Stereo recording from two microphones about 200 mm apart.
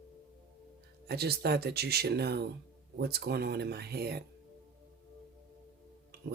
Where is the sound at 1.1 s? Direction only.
55° right (ahead or behind).